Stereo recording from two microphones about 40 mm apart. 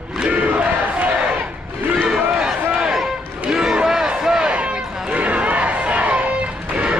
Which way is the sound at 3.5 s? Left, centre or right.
Centre.